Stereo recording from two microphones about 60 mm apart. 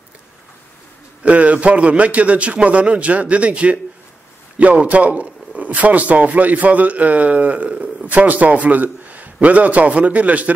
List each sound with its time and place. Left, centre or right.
1.2 s a man's voice: right